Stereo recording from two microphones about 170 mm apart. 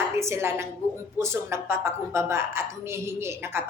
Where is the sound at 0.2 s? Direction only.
15° right (ahead or behind).